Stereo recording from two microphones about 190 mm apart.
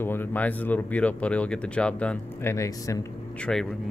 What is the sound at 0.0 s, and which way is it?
Speech, 10° left (ahead or behind).